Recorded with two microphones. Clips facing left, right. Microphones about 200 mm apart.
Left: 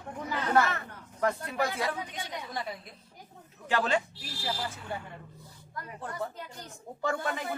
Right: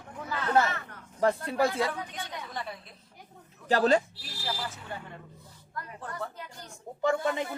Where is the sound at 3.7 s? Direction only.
40° right (ahead or behind).